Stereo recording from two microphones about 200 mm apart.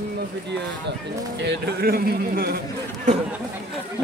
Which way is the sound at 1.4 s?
55° right (ahead or behind).